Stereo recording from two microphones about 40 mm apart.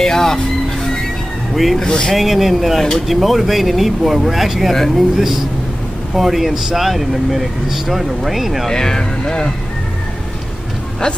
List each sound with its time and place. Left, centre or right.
0.0 s speech: centre
1.5 s speech: centre
1.8 s speech: centre
2.0 s speech: centre
6.1 s speech: centre
8.6 s speech: centre